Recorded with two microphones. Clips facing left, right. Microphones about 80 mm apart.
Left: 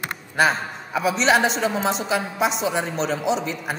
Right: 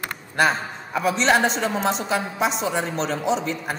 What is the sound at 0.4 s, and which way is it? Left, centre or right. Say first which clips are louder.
A woman's voice: left 1 dB; centre.